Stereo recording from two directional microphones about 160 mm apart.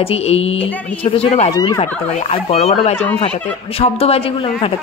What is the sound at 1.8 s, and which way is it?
A woman's voice, 40° left (ahead or behind).